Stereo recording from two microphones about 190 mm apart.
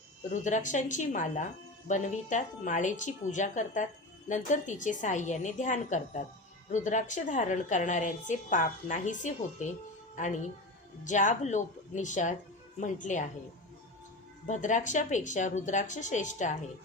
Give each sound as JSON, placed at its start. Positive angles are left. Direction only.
{"t": 0.4, "sound": "a woman's voice", "side_deg": 40}
{"t": 14.4, "sound": "a woman's voice", "side_deg": 40}